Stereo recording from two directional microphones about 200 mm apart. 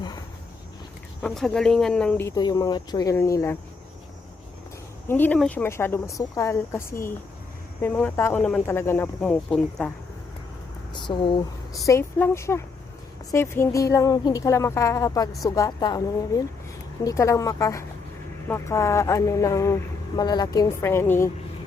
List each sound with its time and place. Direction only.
1.2 s speech: 5° left (ahead or behind)
5.0 s speech: 10° left (ahead or behind)
10.9 s speech: 25° left (ahead or behind)